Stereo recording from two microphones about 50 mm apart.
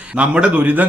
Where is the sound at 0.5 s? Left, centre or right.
Right.